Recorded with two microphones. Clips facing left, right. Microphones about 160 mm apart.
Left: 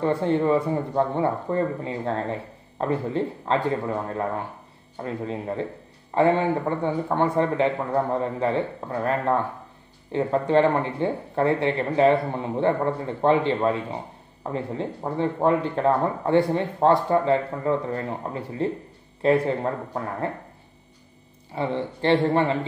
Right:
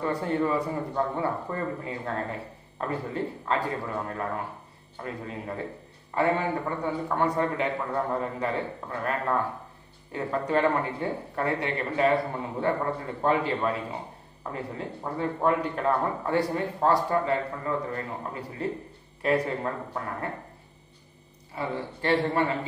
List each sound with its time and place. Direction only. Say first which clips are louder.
0.0 s speech: left 5 dB; 25° left (ahead or behind)
21.5 s speech: left 5 dB; 25° left (ahead or behind)